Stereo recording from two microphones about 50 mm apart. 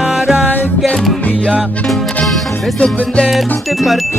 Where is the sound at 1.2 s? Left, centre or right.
Left.